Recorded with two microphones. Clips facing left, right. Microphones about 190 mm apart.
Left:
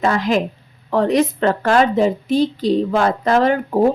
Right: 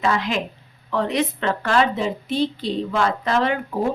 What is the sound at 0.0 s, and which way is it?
Speech, 45° left (ahead or behind).